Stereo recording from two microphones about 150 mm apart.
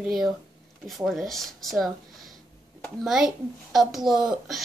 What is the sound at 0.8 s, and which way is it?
A child's voice, centre (ahead or behind).